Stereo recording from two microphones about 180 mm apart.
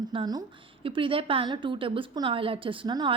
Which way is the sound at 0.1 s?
25° right (ahead or behind).